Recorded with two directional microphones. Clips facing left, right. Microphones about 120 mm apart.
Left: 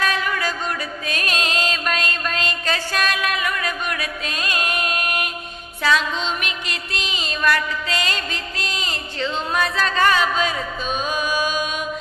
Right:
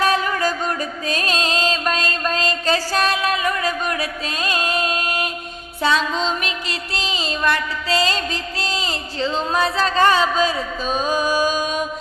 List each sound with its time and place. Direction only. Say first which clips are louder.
0.0 s music: right 4 dB; 35° right (ahead or behind)